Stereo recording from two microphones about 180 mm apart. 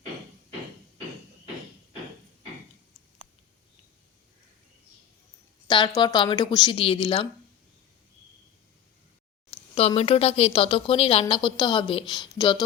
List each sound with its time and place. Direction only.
5.6 s a woman's voice: 25° left (ahead or behind)
9.7 s a woman's voice: 35° left (ahead or behind)